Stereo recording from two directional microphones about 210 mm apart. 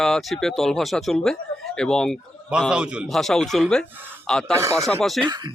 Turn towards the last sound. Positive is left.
turn(degrees=-20)  # may be behind; listen again after turning